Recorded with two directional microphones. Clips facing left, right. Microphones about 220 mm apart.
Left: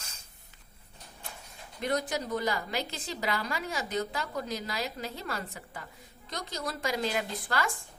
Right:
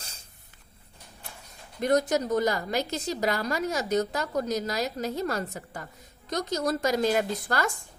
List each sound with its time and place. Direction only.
1.8 s a woman's voice: 45° right (ahead or behind)